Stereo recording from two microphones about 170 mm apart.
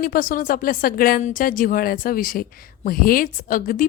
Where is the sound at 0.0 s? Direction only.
55° left (ahead or behind).